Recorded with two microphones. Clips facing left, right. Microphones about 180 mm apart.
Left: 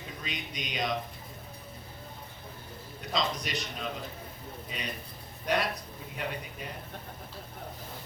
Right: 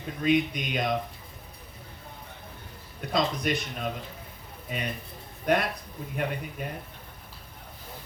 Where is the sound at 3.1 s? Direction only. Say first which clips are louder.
Right 5 dB; 55° right (ahead or behind).